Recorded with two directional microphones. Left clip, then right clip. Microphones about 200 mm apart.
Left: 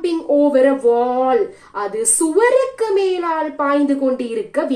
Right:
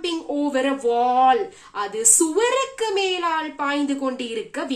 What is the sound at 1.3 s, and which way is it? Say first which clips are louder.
Speech: left 4 dB; 35° right (ahead or behind).